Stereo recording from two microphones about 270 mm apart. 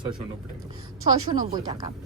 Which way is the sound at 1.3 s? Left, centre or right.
Centre.